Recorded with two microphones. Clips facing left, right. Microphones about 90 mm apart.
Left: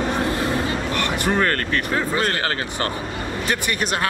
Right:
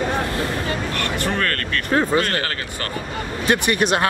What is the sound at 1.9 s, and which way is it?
Speech, 25° right (ahead or behind).